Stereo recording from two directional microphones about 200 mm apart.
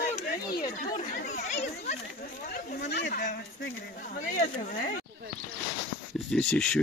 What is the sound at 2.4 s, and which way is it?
Speech, 45° left (ahead or behind).